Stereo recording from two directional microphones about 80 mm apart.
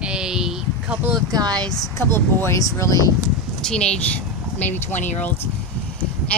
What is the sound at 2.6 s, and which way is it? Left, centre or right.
Speech, left.